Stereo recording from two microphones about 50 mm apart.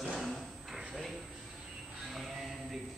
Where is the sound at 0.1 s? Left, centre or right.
Centre.